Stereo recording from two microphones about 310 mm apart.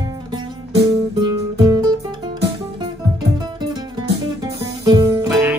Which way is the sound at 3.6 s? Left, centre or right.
Centre.